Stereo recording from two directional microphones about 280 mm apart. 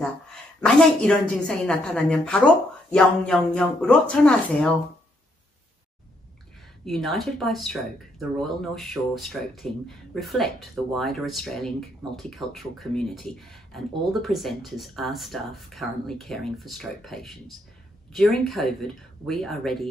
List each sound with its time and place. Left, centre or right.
0.6 s speech: centre
6.8 s speech: centre